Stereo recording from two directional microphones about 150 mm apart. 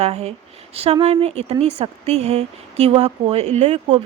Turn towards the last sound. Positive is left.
turn(degrees=-50)  # may be behind; listen again after turning